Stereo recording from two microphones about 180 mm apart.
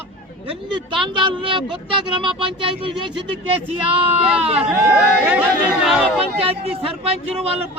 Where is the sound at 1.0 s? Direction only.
25° right (ahead or behind).